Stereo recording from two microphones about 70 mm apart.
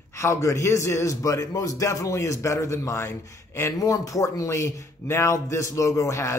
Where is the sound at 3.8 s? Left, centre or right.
Left.